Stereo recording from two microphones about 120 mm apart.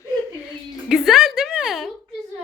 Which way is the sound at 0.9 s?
5° right (ahead or behind).